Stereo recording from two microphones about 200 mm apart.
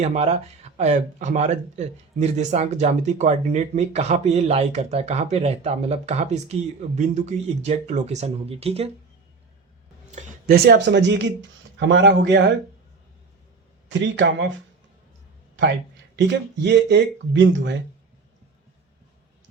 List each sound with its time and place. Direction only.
0.0 s speech: 35° right (ahead or behind)
10.1 s speech: 40° right (ahead or behind); by 12.5 s 60° right (ahead or behind)
13.8 s speech: 60° right (ahead or behind)
16.1 s speech: 60° right (ahead or behind)